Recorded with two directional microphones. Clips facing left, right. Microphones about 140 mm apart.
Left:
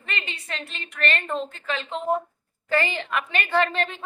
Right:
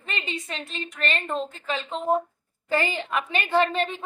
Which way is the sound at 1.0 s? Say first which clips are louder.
Left 3 dB; 15° right (ahead or behind).